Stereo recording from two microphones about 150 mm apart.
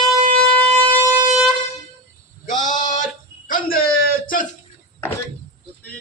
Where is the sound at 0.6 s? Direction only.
40° right (ahead or behind).